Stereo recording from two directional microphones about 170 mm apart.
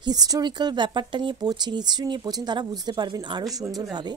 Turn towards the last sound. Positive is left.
turn(degrees=-20)  # may be behind; listen again after turning